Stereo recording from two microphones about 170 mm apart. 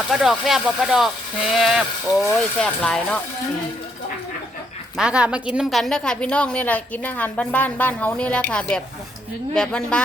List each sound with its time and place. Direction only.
0.1 s speech: centre (ahead or behind)
4.9 s a woman's voice: 5° right (ahead or behind)